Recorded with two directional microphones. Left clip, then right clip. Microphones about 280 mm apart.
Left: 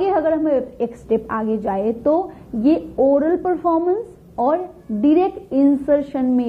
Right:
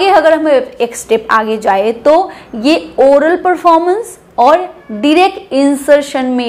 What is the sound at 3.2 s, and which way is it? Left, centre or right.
A woman's voice, centre.